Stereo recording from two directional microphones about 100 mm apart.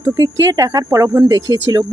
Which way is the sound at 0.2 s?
30° right (ahead or behind).